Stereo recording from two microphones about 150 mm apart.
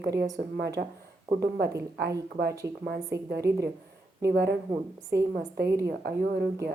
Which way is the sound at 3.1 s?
90° right.